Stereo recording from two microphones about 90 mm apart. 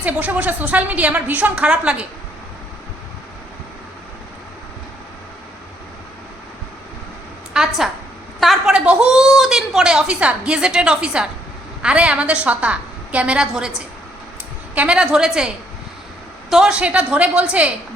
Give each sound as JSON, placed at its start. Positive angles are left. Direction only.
{"t": 0.0, "sound": "a woman's voice", "side_deg": -15}
{"t": 7.6, "sound": "a sound", "side_deg": -10}
{"t": 8.4, "sound": "a woman's voice", "side_deg": 0}
{"t": 8.7, "sound": "a woman's voice", "side_deg": -10}
{"t": 14.8, "sound": "a woman's voice", "side_deg": -10}